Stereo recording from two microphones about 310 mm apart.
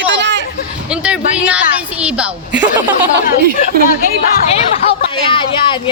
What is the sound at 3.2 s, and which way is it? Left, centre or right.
Speech, left.